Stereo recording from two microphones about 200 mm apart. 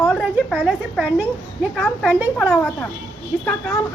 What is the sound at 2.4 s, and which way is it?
A woman's voice, 10° left (ahead or behind).